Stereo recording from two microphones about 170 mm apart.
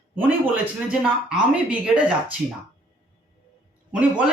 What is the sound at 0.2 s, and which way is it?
Speech, 10° right (ahead or behind).